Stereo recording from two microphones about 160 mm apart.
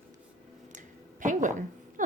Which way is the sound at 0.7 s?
55° right (ahead or behind).